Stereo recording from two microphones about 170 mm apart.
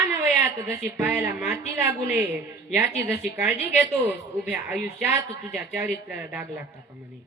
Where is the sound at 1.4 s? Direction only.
70° left (ahead or behind).